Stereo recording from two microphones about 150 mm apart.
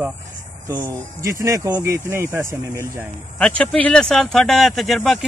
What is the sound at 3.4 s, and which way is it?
Speech, 5° left (ahead or behind).